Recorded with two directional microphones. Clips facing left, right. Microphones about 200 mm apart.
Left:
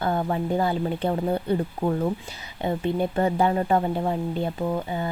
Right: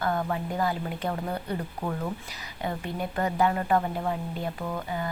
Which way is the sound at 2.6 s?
25° left (ahead or behind).